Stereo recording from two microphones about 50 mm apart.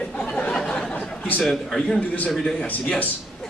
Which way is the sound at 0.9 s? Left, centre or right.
Left.